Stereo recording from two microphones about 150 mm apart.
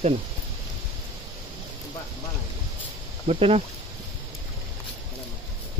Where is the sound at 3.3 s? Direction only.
45° right (ahead or behind).